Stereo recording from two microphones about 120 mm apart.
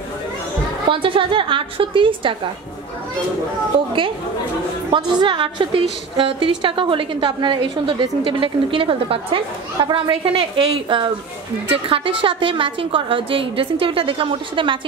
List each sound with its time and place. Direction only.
0.8 s a woman's voice: 45° right (ahead or behind)
4.9 s a woman's voice: 40° right (ahead or behind)